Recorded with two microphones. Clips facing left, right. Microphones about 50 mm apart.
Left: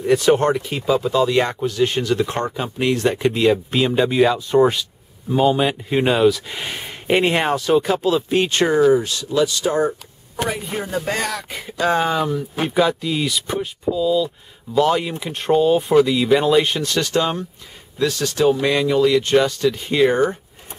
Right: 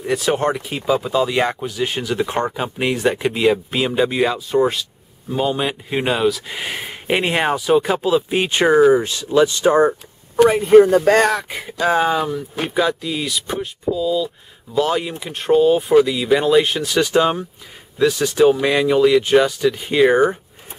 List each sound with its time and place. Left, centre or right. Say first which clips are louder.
0.0 s speech: left 3 dB; centre; by 10.8 s right
11.1 s speech: right 9 dB; right
11.4 s speech: right 1 dB; centre